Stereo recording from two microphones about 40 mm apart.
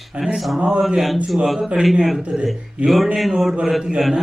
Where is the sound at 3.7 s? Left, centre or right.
Centre.